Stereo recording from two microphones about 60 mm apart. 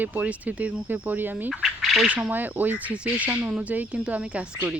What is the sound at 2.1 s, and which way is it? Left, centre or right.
Speech, right.